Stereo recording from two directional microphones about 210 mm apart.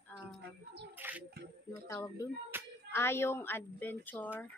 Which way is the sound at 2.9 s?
10° left (ahead or behind).